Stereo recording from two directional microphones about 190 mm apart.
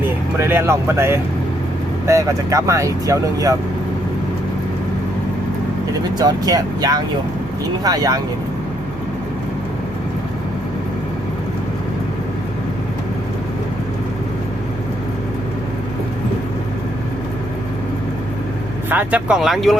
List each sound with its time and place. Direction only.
0.0 s speech: 10° right (ahead or behind)
6.1 s speech: 20° right (ahead or behind)
18.9 s speech: 10° right (ahead or behind)